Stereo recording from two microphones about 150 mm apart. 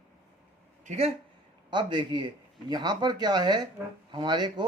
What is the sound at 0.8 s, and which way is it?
Speech, 50° right (ahead or behind).